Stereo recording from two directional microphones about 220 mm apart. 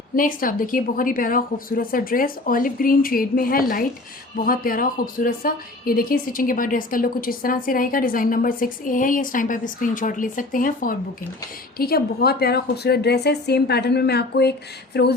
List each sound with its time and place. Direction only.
0.2 s a woman's voice: 40° left (ahead or behind)